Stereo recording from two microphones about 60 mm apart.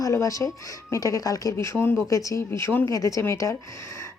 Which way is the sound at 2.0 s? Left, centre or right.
Left.